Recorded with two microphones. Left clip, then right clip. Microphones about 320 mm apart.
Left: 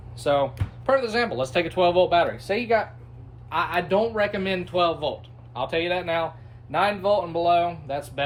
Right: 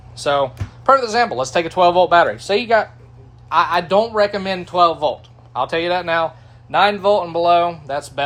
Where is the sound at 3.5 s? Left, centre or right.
Right.